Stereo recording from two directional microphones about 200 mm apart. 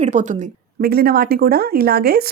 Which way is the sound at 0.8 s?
50° right (ahead or behind).